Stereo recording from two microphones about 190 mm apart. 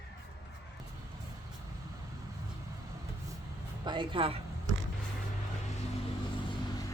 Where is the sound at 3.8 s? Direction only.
25° right (ahead or behind).